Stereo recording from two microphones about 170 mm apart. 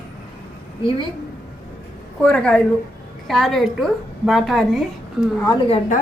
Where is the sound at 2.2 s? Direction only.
5° left (ahead or behind).